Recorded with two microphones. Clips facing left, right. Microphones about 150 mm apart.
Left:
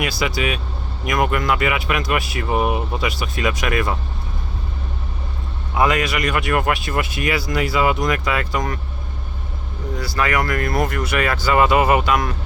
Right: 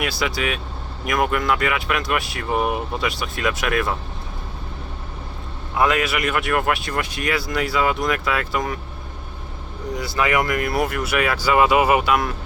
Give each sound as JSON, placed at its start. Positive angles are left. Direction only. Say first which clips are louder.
{"t": 0.0, "sound": "speech", "louder": "left 2 dB", "side_deg": 0}
{"t": 5.7, "sound": "speech", "louder": "left 1 dB", "side_deg": 0}
{"t": 10.0, "sound": "speech", "louder": "even", "side_deg": -20}